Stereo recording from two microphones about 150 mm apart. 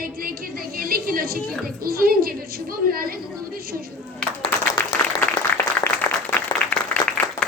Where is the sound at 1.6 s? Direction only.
85° right.